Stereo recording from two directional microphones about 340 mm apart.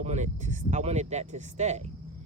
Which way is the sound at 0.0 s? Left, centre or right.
Centre.